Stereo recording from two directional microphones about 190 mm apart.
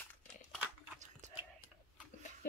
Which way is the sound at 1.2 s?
40° right (ahead or behind).